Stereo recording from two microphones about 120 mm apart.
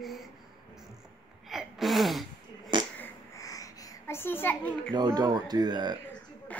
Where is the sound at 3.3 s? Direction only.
30° left (ahead or behind).